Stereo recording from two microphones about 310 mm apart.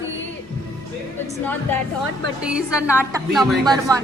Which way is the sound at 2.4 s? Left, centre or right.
Centre.